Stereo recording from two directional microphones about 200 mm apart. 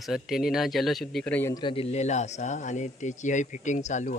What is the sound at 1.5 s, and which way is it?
Speech, 25° left (ahead or behind).